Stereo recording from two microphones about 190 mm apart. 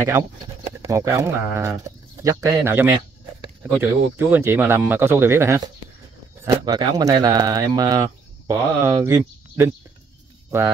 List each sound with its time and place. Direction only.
0.0 s speech: 15° right (ahead or behind)